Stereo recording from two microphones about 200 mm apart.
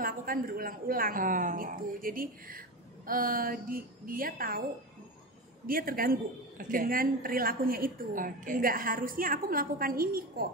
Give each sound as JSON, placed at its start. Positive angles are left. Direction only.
{"t": 0.0, "sound": "a woman's voice", "side_deg": -45}
{"t": 5.7, "sound": "a woman's voice", "side_deg": -45}